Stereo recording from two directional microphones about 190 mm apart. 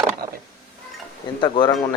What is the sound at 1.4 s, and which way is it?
Speech, 25° left (ahead or behind).